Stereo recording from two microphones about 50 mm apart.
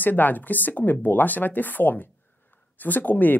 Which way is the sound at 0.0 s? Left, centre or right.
Left.